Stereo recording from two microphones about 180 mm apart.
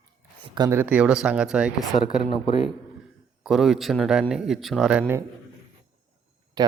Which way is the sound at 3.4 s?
Centre (ahead or behind).